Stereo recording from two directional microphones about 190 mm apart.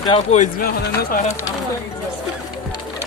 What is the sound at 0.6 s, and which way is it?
Speech, 50° left (ahead or behind).